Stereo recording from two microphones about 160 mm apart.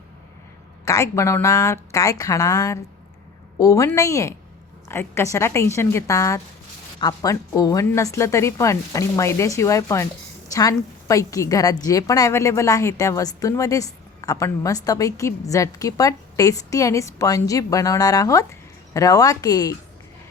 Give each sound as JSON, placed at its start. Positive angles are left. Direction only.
{"t": 0.9, "sound": "a woman's voice", "side_deg": 20}